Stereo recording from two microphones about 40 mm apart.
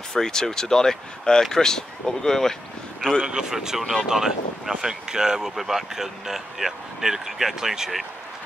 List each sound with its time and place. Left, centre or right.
0.1 s speech: centre
3.2 s speech: centre